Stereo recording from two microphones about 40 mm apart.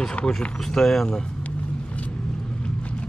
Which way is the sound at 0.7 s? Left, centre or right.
Centre.